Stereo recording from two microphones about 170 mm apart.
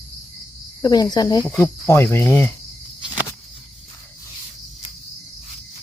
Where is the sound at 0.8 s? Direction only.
25° left (ahead or behind).